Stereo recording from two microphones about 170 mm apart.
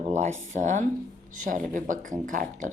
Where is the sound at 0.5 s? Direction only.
45° right (ahead or behind).